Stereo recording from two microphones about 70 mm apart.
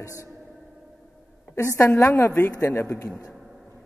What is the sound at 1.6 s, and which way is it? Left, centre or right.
A man's voice, left.